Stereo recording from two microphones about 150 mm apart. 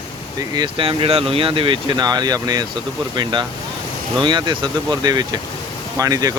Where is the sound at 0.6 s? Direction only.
35° right (ahead or behind).